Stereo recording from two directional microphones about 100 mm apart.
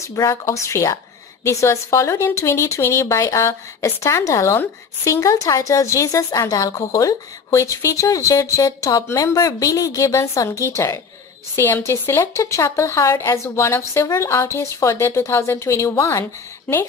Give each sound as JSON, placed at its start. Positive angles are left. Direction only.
{"t": 0.0, "sound": "a woman's voice", "side_deg": 30}